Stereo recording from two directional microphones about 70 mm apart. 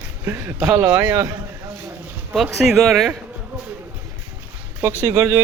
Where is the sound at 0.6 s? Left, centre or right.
Right.